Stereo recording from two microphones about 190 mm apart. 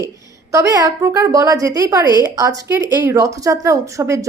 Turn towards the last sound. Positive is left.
turn(degrees=-15)  # may be behind; listen again after turning